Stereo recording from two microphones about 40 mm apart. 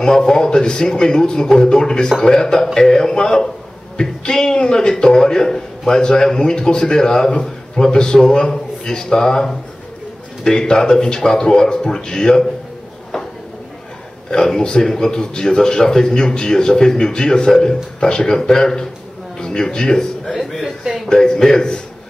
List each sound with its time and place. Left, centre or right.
0.0 s a man's voice: centre
14.3 s a man's voice: centre
20.3 s a man's voice: centre